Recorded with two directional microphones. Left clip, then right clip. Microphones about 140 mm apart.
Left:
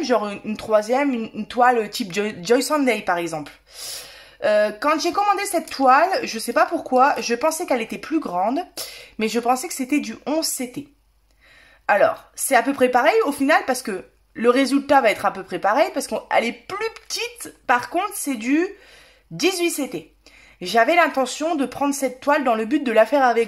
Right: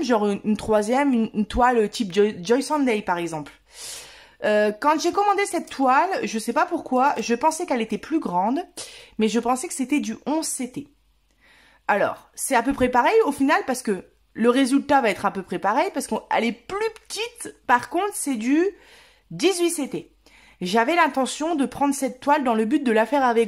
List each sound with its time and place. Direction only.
0.0 s speech: 45° right (ahead or behind)
2.0 s speech: 20° right (ahead or behind)
11.8 s speech: 30° right (ahead or behind)